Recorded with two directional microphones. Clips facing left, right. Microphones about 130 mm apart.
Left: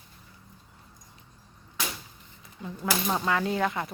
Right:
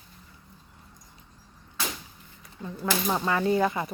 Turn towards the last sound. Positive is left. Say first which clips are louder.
# right 4 dB
turn(degrees=-5)  # may be behind; listen again after turning